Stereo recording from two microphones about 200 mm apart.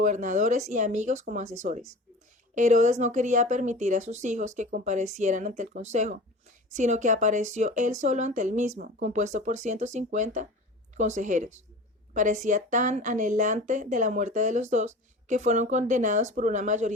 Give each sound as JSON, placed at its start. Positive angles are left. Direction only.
{"t": 0.0, "sound": "a woman's voice", "side_deg": -40}